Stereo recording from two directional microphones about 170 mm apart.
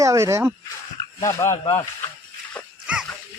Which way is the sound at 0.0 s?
15° right (ahead or behind).